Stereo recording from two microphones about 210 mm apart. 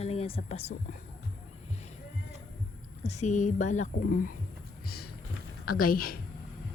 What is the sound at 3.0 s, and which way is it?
Speech, 35° left (ahead or behind).